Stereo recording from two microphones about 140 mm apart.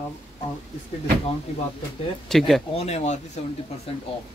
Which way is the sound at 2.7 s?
50° left (ahead or behind).